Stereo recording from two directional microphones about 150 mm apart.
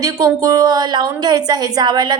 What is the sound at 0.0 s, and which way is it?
A woman's voice, 25° right (ahead or behind).